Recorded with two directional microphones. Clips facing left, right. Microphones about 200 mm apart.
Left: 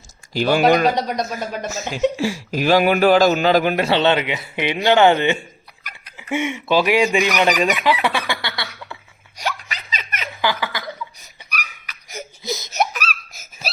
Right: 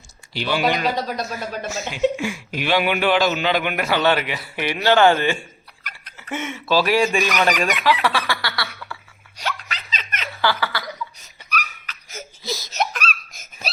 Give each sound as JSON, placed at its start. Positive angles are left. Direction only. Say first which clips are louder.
{"t": 0.3, "sound": "speech", "louder": "left 6 dB", "side_deg": 45}
{"t": 0.9, "sound": "speech", "louder": "left 3 dB", "side_deg": 20}
{"t": 1.7, "sound": "speech", "louder": "even", "side_deg": 45}
{"t": 5.8, "sound": "speech", "louder": "even", "side_deg": 10}
{"t": 9.4, "sound": "laughter", "louder": "left 2 dB", "side_deg": 10}
{"t": 12.8, "sound": "laughter", "louder": "left 3 dB", "side_deg": 5}